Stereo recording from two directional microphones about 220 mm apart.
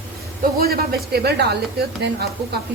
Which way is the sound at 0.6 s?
45° right (ahead or behind).